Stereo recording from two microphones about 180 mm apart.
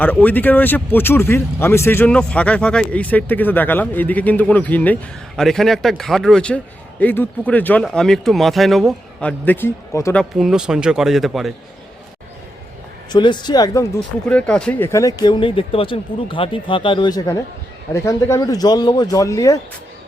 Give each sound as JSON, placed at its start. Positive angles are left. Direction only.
{"t": 0.0, "sound": "speech", "side_deg": 10}
{"t": 9.4, "sound": "speech", "side_deg": 10}
{"t": 10.2, "sound": "speech", "side_deg": -5}
{"t": 13.1, "sound": "speech", "side_deg": 25}
{"t": 14.3, "sound": "speech", "side_deg": 5}